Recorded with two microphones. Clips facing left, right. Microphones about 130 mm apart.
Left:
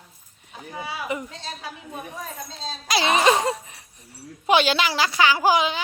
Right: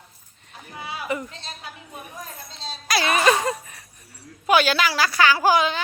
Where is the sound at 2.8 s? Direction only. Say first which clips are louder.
Left 1 dB; 20° left (ahead or behind).